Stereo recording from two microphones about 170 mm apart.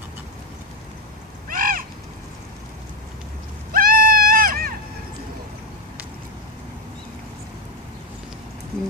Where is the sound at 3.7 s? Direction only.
55° right (ahead or behind).